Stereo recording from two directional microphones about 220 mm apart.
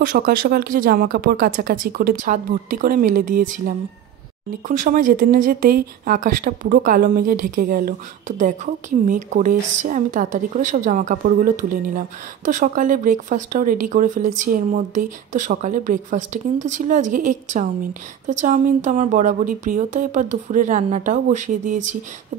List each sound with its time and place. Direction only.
0.0 s speech: 40° right (ahead or behind)